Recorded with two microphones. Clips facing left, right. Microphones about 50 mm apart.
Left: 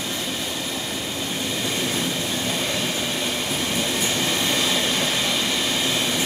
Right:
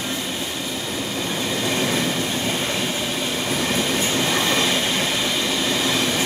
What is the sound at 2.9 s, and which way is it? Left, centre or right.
Train, centre.